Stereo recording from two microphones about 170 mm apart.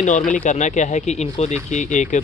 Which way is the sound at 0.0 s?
45° left (ahead or behind).